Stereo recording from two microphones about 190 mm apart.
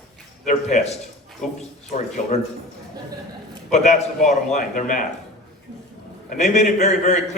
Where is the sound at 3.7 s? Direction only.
40° left (ahead or behind).